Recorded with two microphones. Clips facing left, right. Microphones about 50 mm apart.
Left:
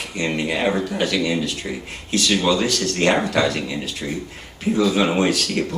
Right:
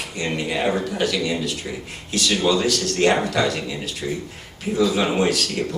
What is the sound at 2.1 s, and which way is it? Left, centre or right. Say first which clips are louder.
Speech: left 1 dB; left.